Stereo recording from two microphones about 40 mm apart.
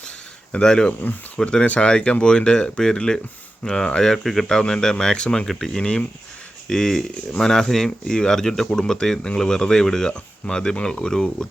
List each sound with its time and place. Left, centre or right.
0.5 s speech: centre
1.6 s speech: left
4.1 s speech: centre
4.4 s speech: centre
5.5 s speech: centre